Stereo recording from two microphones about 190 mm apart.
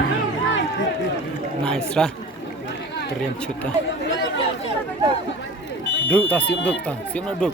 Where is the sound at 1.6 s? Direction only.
5° left (ahead or behind).